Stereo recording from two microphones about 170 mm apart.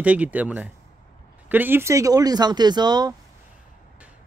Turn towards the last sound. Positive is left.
turn(degrees=-25)  # may be behind; listen again after turning